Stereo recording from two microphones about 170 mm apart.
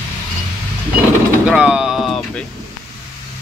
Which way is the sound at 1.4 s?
5° right (ahead or behind).